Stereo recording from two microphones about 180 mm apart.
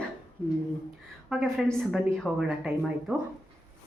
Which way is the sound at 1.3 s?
Centre (ahead or behind).